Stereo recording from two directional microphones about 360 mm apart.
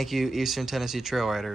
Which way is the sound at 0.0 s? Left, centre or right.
Centre.